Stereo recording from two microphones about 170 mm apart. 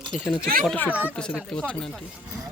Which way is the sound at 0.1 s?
Centre (ahead or behind).